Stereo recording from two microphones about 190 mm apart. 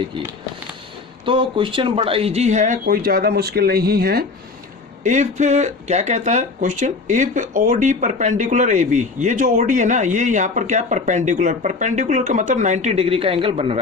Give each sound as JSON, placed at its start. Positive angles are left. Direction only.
{"t": 1.2, "sound": "speech", "side_deg": -25}
{"t": 2.8, "sound": "speech", "side_deg": -50}
{"t": 5.0, "sound": "speech", "side_deg": -40}